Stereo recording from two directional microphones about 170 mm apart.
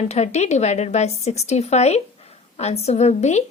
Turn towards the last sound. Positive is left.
turn(degrees=40)  # may be behind; listen again after turning